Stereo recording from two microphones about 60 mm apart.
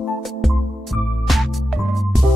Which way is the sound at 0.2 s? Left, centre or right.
Centre.